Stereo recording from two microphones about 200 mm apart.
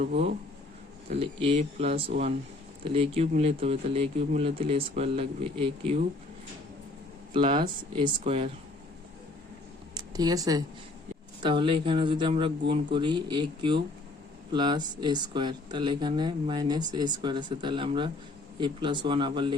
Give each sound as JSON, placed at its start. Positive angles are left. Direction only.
{"t": 0.0, "sound": "speech", "side_deg": -30}
{"t": 7.3, "sound": "speech", "side_deg": -25}
{"t": 9.9, "sound": "a sound", "side_deg": -20}
{"t": 11.4, "sound": "speech", "side_deg": -25}